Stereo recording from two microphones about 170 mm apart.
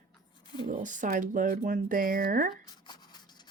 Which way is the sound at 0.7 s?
50° right (ahead or behind).